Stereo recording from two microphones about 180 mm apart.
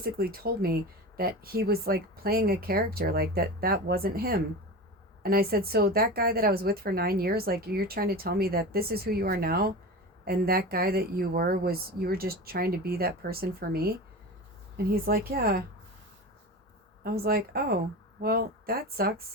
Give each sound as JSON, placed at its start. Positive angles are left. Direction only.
{"t": 0.0, "sound": "speech", "side_deg": -55}
{"t": 17.0, "sound": "speech", "side_deg": -55}